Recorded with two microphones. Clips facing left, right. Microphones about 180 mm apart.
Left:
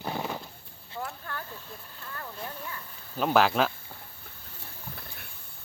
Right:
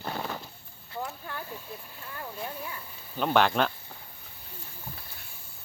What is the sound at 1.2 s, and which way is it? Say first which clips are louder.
Dog: right 1 dB; 10° right (ahead or behind).